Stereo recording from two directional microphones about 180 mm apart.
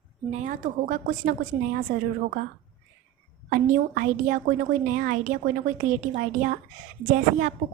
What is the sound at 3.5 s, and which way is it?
A woman's voice, 50° right (ahead or behind).